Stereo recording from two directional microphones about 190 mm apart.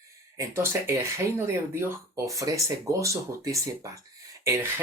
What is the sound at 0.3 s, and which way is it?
Speech, 15° right (ahead or behind).